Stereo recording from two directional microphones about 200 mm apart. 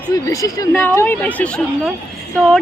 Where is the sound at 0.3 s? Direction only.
15° left (ahead or behind).